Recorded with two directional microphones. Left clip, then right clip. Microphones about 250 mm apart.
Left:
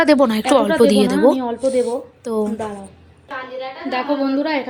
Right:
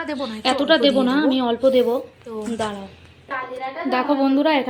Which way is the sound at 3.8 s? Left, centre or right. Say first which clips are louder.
Right 1 dB; centre.